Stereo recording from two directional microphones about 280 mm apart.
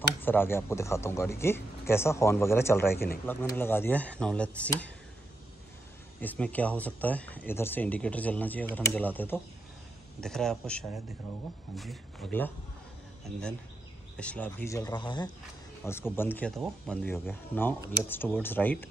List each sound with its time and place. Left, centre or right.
0.2 s speech: centre
6.2 s speech: centre
14.1 s speech: centre